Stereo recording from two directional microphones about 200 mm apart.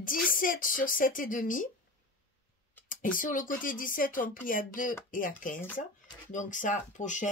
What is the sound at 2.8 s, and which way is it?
Speech, 40° left (ahead or behind).